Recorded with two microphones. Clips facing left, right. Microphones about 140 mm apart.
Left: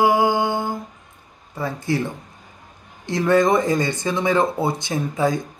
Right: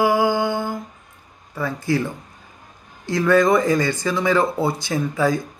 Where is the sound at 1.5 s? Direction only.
25° left (ahead or behind).